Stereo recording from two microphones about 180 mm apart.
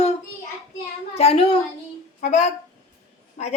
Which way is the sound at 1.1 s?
35° left (ahead or behind).